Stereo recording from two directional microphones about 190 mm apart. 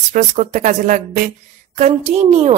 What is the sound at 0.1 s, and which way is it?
A woman's voice, 40° right (ahead or behind).